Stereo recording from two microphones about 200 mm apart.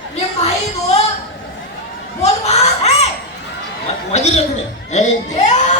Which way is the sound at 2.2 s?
35° left (ahead or behind).